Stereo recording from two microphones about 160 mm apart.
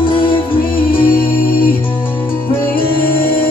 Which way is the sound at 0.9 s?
60° left (ahead or behind).